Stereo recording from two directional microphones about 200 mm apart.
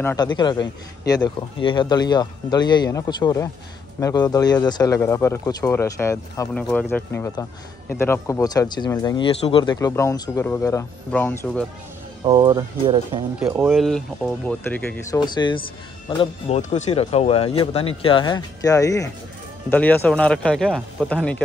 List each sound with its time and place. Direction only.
0.0 s speech: 20° left (ahead or behind)
6.5 s speech: 5° left (ahead or behind)
12.3 s speech: 20° right (ahead or behind)
13.4 s speech: 10° right (ahead or behind)
13.7 s speech: centre (ahead or behind)
15.1 s speech: 20° left (ahead or behind); by 21.4 s 5° left (ahead or behind)